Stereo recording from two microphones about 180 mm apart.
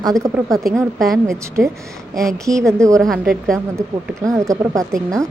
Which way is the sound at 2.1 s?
15° right (ahead or behind).